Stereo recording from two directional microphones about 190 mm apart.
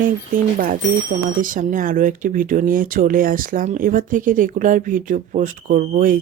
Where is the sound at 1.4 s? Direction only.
45° right (ahead or behind).